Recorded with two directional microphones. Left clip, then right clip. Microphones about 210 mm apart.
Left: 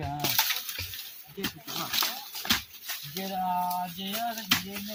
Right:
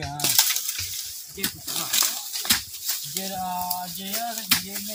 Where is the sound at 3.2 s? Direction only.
Centre (ahead or behind).